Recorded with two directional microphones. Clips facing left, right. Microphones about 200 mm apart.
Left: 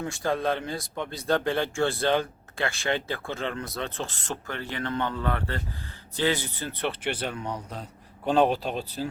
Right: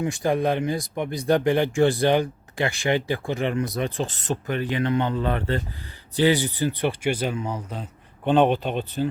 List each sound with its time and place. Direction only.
0.0 s speech: 15° right (ahead or behind); by 8.9 s centre (ahead or behind)